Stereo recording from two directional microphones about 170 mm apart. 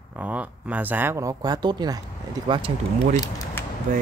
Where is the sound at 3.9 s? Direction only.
50° right (ahead or behind).